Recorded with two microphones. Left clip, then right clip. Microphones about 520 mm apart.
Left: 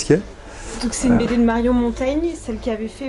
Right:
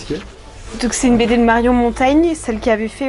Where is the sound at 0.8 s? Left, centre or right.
Right.